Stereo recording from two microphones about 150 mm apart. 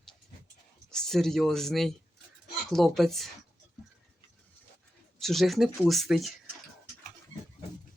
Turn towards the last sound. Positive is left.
turn(degrees=0)  # may be behind; listen again after turning